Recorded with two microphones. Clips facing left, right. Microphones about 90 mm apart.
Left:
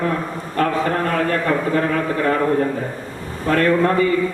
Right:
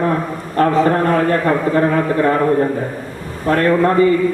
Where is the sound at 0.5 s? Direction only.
30° right (ahead or behind).